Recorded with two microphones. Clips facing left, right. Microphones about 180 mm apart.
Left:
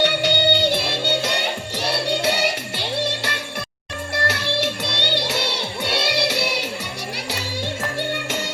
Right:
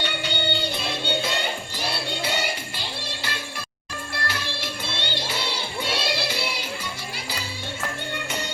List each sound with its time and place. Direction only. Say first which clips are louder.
0.0 s music: left 9 dB; 75° left (ahead or behind)